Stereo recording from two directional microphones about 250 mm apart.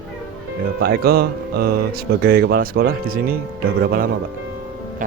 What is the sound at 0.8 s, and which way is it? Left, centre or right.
Speech, right.